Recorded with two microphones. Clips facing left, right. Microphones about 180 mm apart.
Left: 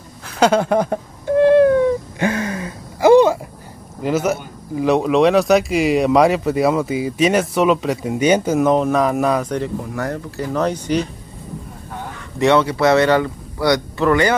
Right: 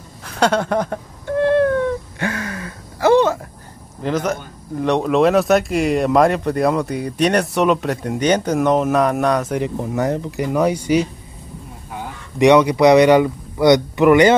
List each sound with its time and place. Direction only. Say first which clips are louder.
0.2 s a sound: left 2 dB; 5° left (ahead or behind)
4.0 s speech: left 2 dB; 5° left (ahead or behind)
9.5 s speech: right 1 dB; 15° right (ahead or behind)